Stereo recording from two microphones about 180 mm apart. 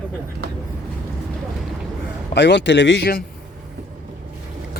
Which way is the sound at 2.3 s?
75° left (ahead or behind).